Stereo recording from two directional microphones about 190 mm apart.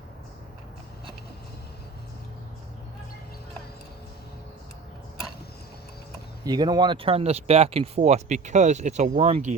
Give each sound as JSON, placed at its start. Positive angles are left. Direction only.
{"t": 6.4, "sound": "speech", "side_deg": -20}